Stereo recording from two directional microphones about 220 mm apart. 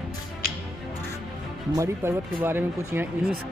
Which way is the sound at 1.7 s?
10° right (ahead or behind).